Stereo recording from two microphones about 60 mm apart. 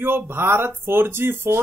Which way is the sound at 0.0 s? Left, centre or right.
Right.